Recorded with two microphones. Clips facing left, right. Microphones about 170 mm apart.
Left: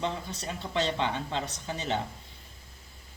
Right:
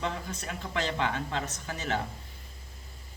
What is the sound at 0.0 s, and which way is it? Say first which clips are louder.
Speech: left 1 dB; 30° left (ahead or behind).